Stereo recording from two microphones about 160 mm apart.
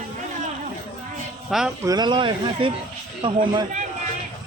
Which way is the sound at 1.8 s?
25° right (ahead or behind).